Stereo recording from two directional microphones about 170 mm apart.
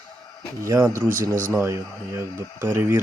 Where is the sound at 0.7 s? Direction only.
20° right (ahead or behind).